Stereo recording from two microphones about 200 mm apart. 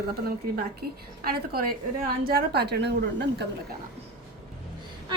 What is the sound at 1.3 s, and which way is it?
A woman's voice, 50° right (ahead or behind).